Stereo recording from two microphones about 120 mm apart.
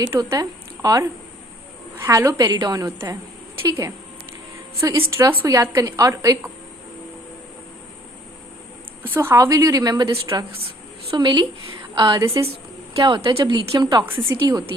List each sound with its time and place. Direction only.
0.1 s a woman's voice: 25° right (ahead or behind)
9.1 s a woman's voice: 25° right (ahead or behind)
11.1 s a woman's voice: 40° right (ahead or behind)
13.0 s a woman's voice: 40° right (ahead or behind)